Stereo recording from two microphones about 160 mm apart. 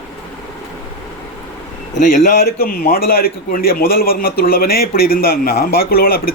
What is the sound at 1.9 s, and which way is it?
A man's voice, 65° left (ahead or behind).